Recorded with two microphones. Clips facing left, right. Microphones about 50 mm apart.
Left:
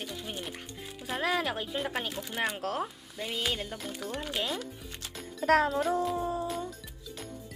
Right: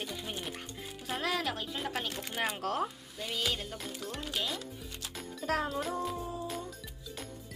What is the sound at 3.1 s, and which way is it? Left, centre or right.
Music, centre.